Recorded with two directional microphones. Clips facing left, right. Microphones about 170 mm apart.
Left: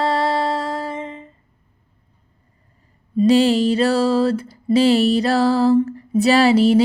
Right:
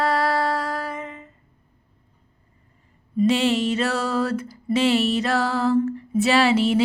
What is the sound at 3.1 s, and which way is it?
Music, 35° left (ahead or behind).